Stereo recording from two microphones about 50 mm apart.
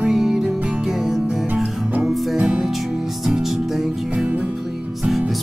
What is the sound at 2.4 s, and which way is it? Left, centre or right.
Music, centre.